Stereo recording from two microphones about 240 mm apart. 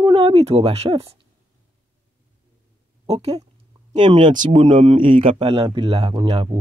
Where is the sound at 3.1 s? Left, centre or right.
Right.